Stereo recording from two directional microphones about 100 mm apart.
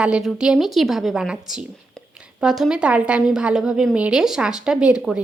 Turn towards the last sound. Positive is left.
turn(degrees=-10)  # may be behind; listen again after turning